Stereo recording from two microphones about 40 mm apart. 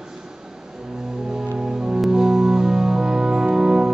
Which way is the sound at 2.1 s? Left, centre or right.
Centre.